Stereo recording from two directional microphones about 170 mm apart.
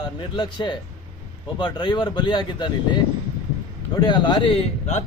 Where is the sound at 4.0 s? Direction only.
25° left (ahead or behind).